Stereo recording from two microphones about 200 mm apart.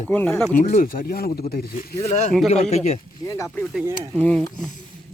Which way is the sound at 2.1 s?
35° left (ahead or behind).